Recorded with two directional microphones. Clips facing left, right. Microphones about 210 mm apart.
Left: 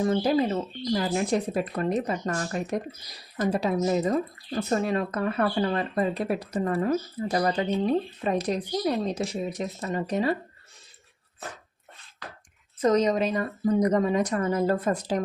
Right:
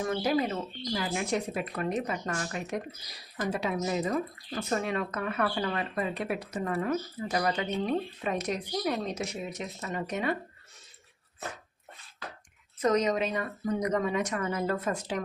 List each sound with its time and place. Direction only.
0.0 s speech: 30° left (ahead or behind)
12.8 s speech: 30° left (ahead or behind)